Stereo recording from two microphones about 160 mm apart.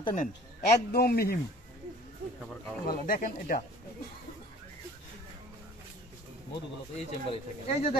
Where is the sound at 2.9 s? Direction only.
60° left (ahead or behind).